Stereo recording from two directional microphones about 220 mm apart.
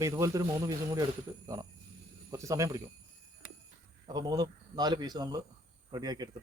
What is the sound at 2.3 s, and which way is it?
Speech, 15° right (ahead or behind).